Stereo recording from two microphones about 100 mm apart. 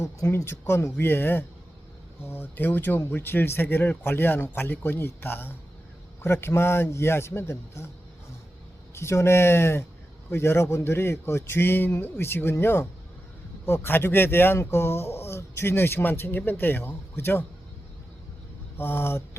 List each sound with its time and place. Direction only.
0.0 s speech: 30° left (ahead or behind)
9.0 s speech: 25° left (ahead or behind)
18.8 s speech: 20° left (ahead or behind)